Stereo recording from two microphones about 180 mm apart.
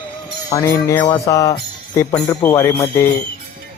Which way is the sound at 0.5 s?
15° left (ahead or behind).